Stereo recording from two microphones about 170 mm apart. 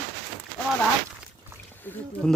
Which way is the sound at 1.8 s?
10° left (ahead or behind).